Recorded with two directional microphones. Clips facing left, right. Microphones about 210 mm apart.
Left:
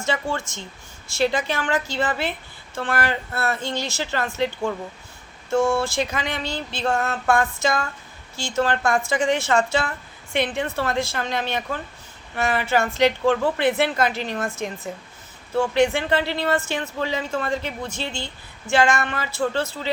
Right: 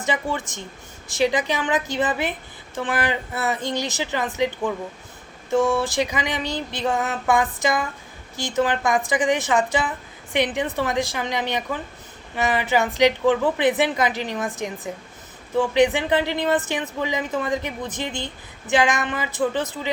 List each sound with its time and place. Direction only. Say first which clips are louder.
1.1 s speech: right 1 dB; 15° right (ahead or behind)